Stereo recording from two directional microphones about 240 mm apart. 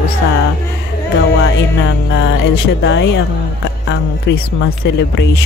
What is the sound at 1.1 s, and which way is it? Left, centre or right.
Speech, left.